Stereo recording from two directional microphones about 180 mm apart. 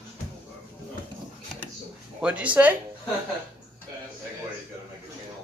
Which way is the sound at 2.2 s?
5° right (ahead or behind).